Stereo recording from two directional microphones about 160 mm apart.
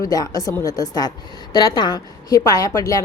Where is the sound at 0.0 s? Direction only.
20° left (ahead or behind).